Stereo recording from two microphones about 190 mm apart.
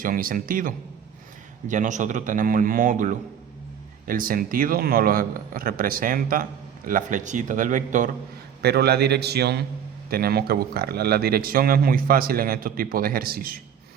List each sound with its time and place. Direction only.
0.0 s a man's voice: 50° right (ahead or behind)
8.6 s a man's voice: 60° right (ahead or behind)